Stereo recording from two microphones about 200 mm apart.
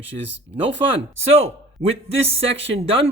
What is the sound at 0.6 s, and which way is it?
Speech, 25° right (ahead or behind).